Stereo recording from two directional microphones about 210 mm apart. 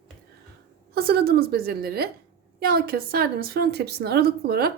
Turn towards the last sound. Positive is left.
turn(degrees=-45)  # may be behind; listen again after turning